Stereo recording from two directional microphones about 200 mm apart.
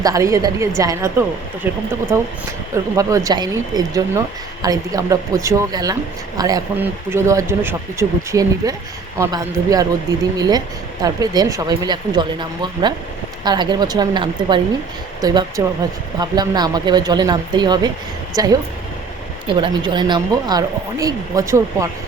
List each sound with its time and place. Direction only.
0.0 s speech: 15° right (ahead or behind)
19.5 s speech: 25° right (ahead or behind)